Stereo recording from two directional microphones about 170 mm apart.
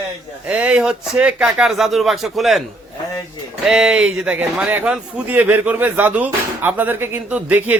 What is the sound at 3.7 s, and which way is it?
A man's voice, 5° right (ahead or behind).